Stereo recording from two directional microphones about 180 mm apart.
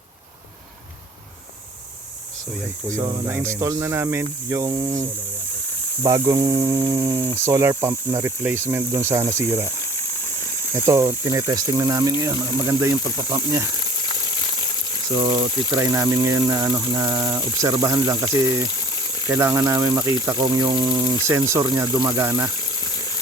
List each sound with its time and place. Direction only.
3.0 s cricket: 25° right (ahead or behind)
3.6 s speech: 15° right (ahead or behind)
4.4 s cricket: 20° right (ahead or behind)
6.0 s speech: 20° right (ahead or behind)
10.8 s speech: 15° right (ahead or behind)
14.0 s a sound: 25° left (ahead or behind)
15.2 s cricket: 20° right (ahead or behind)
15.7 s speech: 20° right (ahead or behind)
18.6 s boiling: 20° left (ahead or behind)
19.3 s speech: 15° right (ahead or behind)
20.2 s cricket: 20° right (ahead or behind)
21.0 s speech: 15° right (ahead or behind)
22.5 s a sound: 25° left (ahead or behind)